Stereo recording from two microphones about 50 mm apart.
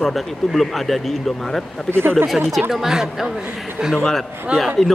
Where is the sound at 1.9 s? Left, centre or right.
Right.